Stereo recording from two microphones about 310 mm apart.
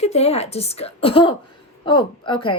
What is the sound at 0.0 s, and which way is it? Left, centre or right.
A woman's voice, centre.